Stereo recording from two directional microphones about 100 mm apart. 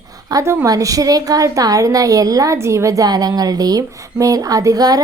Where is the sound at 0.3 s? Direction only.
35° right (ahead or behind).